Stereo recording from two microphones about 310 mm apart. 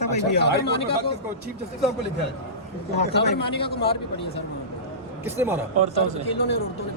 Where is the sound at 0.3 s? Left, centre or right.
Left.